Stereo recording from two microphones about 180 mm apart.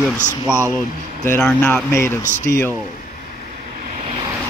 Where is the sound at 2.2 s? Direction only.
40° left (ahead or behind).